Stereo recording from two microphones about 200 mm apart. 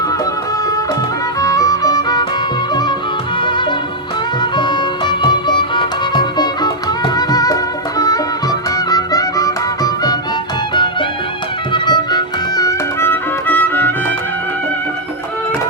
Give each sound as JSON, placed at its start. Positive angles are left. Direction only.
{"t": 1.4, "sound": "music", "side_deg": 15}
{"t": 4.5, "sound": "music", "side_deg": 25}
{"t": 11.7, "sound": "music", "side_deg": 20}